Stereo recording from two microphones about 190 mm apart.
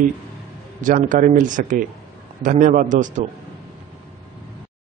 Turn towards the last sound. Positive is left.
turn(degrees=-40)  # may be behind; listen again after turning